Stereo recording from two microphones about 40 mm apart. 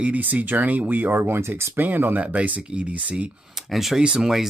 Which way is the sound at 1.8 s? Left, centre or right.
Right.